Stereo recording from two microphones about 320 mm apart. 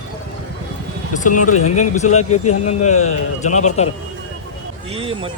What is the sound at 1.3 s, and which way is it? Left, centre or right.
Speech, left.